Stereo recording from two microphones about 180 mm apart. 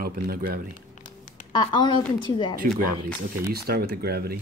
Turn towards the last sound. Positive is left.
turn(degrees=-60)  # may be behind; listen again after turning